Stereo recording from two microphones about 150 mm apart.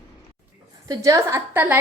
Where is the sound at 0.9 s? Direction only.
20° right (ahead or behind).